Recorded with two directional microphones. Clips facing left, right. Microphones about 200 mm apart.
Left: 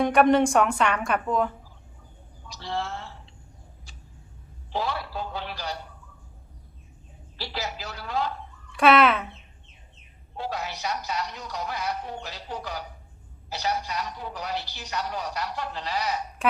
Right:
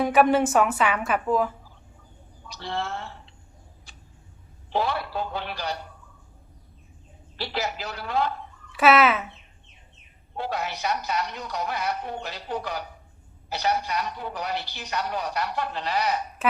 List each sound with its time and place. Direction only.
0.0 s a woman's voice: 5° right (ahead or behind)
2.5 s a sound: 60° right (ahead or behind)
3.9 s vehicle: 55° right (ahead or behind)
4.7 s a man's voice: 60° right (ahead or behind)
7.3 s a man's voice: 60° right (ahead or behind)
8.7 s speech: 5° right (ahead or behind)
10.3 s a man's voice: 60° right (ahead or behind)